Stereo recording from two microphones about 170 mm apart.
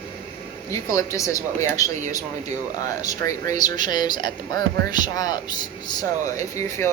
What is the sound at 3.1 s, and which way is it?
Speech, 20° left (ahead or behind).